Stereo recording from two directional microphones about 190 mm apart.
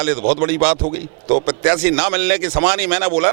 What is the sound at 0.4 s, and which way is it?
A man's voice, 10° right (ahead or behind).